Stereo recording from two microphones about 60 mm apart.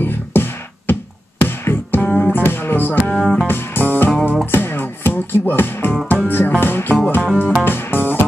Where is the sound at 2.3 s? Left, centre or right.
Left.